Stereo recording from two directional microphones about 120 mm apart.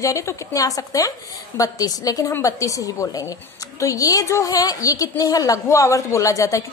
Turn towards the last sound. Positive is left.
turn(degrees=25)  # may be behind; listen again after turning